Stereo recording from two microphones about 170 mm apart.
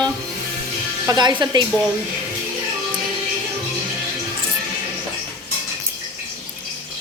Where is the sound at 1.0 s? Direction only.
25° right (ahead or behind).